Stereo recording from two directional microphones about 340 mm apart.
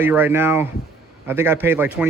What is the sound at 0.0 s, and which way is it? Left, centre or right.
A man's voice, centre.